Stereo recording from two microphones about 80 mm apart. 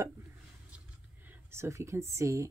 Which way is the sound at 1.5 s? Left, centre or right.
Right.